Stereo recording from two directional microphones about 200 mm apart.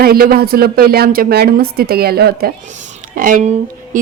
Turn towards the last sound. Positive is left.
turn(degrees=-40)  # may be behind; listen again after turning